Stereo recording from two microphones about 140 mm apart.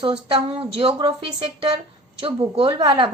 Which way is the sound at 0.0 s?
45° right (ahead or behind).